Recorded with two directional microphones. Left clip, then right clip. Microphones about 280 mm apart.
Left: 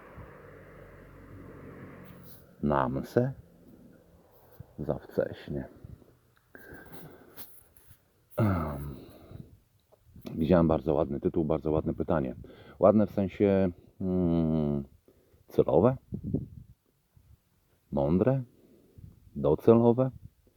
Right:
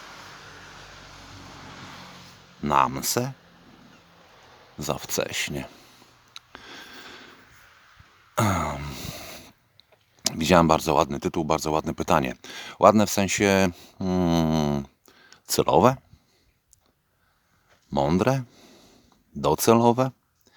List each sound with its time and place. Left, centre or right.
2.6 s speech: centre
5.0 s speech: centre
8.4 s a sound: centre
10.2 s speech: centre
18.0 s speech: centre